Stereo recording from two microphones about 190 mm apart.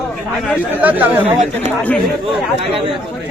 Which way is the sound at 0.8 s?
10° right (ahead or behind).